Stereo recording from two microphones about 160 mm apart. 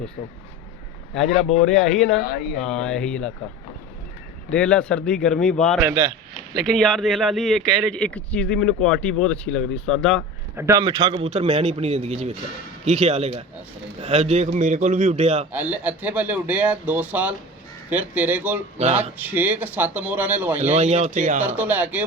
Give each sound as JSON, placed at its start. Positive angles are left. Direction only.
{"t": 1.6, "sound": "speech", "side_deg": 0}
{"t": 4.5, "sound": "speech", "side_deg": 5}
{"t": 10.6, "sound": "a man's voice", "side_deg": -20}
{"t": 15.5, "sound": "speech", "side_deg": -10}
{"t": 20.7, "sound": "a man's voice", "side_deg": -40}
{"t": 21.4, "sound": "speech", "side_deg": -10}